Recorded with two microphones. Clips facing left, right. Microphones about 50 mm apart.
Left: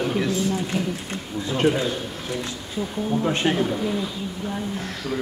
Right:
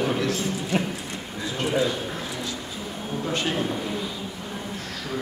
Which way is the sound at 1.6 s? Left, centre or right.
Left.